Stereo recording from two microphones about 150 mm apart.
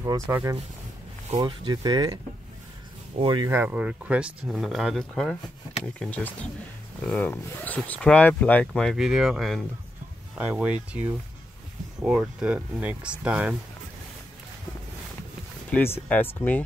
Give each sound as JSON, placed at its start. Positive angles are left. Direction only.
{"t": 0.0, "sound": "speech", "side_deg": -20}
{"t": 1.3, "sound": "speech", "side_deg": -30}
{"t": 3.2, "sound": "speech", "side_deg": -35}
{"t": 3.4, "sound": "speech", "side_deg": -15}
{"t": 15.7, "sound": "speech", "side_deg": 10}